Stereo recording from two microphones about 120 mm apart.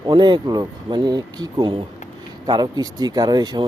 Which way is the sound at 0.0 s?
40° right (ahead or behind).